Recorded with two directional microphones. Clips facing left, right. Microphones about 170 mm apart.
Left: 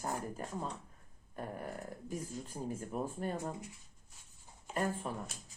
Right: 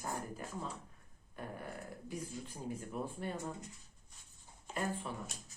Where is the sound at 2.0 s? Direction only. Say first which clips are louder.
Left 1 dB; 45° left (ahead or behind).